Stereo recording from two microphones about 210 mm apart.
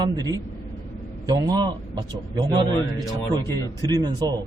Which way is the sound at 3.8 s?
20° right (ahead or behind).